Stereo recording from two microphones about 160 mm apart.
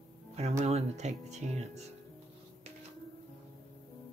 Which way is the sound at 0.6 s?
45° right (ahead or behind).